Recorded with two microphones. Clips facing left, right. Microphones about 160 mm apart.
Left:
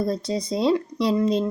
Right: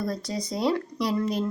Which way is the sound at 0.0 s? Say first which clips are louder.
Left 5 dB; 25° left (ahead or behind).